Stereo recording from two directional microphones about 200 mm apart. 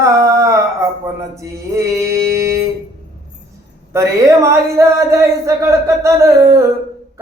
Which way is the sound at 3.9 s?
15° right (ahead or behind).